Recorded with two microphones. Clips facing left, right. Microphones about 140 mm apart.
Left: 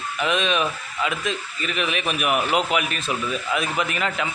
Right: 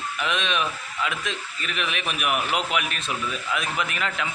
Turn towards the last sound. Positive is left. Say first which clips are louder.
# left 3 dB
turn(degrees=5)  # may be behind; listen again after turning